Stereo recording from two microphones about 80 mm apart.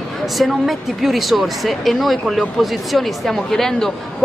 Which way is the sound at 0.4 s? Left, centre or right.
Centre.